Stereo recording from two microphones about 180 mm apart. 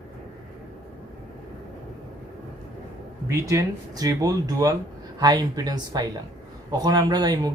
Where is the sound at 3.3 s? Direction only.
15° right (ahead or behind).